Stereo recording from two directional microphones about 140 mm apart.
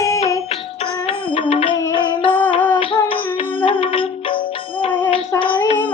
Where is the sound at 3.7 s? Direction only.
40° left (ahead or behind).